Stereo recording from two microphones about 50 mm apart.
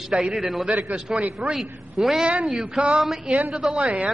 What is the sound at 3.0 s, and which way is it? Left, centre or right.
Speech, centre.